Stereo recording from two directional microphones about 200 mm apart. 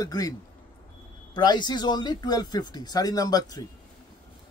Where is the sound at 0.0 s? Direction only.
20° left (ahead or behind).